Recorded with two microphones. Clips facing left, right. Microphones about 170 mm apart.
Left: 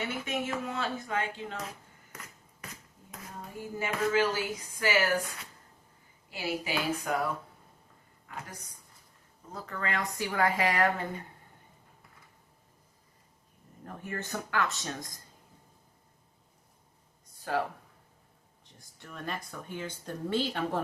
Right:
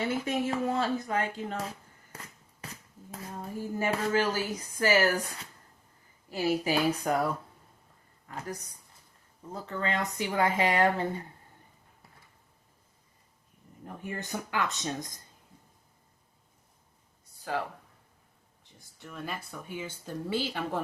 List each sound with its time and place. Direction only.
0.0 s speech: 35° right (ahead or behind)
2.1 s a sound: 30° right (ahead or behind)
3.8 s speech: 40° right (ahead or behind)
6.3 s speech: 40° right (ahead or behind)
9.5 s speech: 30° right (ahead or behind)
13.8 s speech: 15° right (ahead or behind)
17.3 s a sound: centre (ahead or behind)
18.6 s speech: centre (ahead or behind)